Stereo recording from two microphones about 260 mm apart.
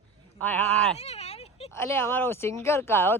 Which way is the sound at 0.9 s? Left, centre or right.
Left.